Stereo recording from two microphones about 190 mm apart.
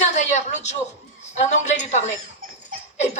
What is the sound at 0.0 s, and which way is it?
A woman's voice, 40° left (ahead or behind).